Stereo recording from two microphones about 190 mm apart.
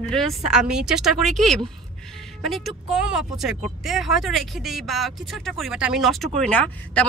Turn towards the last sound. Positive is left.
turn(degrees=5)  # may be behind; listen again after turning